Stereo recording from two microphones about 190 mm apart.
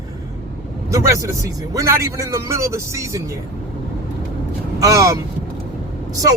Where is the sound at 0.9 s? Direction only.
15° right (ahead or behind).